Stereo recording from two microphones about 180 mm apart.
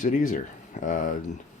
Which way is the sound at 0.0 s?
45° left (ahead or behind).